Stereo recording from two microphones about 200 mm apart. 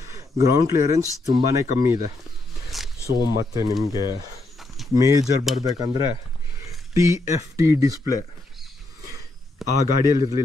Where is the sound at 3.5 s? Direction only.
15° right (ahead or behind).